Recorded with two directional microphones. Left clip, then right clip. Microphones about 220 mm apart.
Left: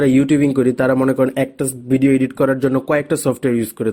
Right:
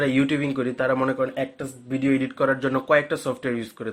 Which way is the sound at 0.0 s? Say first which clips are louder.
Left 8 dB; 35° left (ahead or behind).